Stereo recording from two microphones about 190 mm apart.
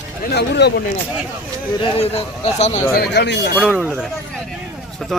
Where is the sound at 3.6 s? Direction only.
Centre (ahead or behind).